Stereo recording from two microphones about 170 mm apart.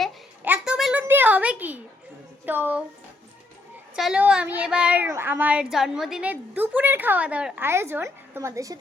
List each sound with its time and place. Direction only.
0.4 s a sound: 5° right (ahead or behind)
2.5 s a woman's voice: 10° right (ahead or behind)
3.9 s a woman's voice: 5° right (ahead or behind)